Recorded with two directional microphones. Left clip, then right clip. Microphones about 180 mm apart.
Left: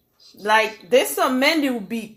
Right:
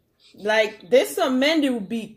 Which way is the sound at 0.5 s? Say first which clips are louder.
Left 1 dB; 20° right (ahead or behind).